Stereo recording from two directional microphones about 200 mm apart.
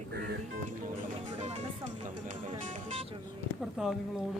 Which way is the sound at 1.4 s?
35° right (ahead or behind).